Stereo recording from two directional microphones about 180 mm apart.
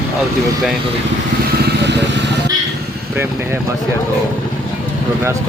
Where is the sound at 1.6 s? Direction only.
70° right (ahead or behind).